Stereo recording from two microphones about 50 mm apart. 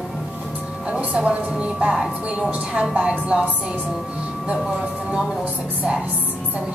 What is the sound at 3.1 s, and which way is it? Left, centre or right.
Speech, right.